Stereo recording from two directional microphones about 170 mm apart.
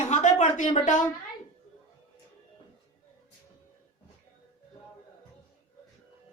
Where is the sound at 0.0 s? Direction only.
45° left (ahead or behind).